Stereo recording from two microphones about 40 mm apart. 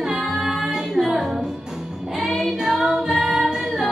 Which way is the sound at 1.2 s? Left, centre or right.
Centre.